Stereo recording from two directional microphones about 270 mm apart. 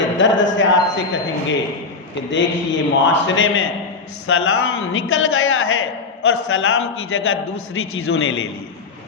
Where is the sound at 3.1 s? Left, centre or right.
Left.